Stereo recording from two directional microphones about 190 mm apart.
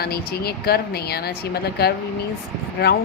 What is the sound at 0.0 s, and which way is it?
A woman's voice, 55° left (ahead or behind).